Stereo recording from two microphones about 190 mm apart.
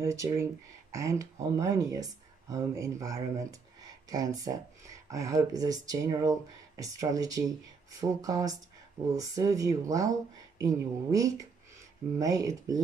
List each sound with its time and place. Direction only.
0.0 s speech: 15° right (ahead or behind)